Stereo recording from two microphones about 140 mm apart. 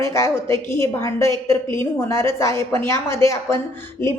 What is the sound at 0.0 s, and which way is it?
A woman's voice, 20° left (ahead or behind).